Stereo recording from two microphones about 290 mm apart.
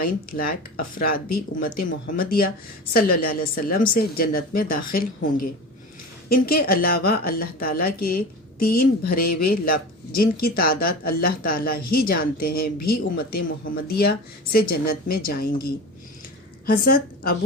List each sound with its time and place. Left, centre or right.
0.0 s speech: left